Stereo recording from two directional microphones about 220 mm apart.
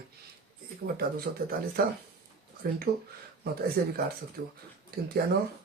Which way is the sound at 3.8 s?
40° right (ahead or behind).